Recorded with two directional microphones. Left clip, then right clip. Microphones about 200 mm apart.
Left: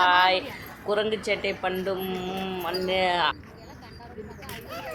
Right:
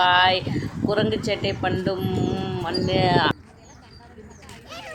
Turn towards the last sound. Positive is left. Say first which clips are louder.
# right 3 dB
turn(degrees=-10)  # may be behind; listen again after turning